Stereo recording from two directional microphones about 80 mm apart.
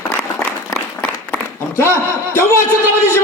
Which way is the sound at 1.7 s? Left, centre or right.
Left.